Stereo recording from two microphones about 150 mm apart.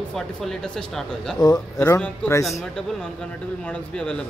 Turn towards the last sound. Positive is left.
turn(degrees=5)  # may be behind; listen again after turning